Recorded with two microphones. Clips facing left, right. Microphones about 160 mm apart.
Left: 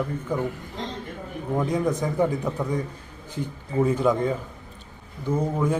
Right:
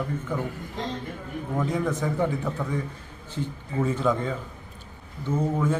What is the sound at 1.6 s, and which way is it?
A man's voice, 15° left (ahead or behind).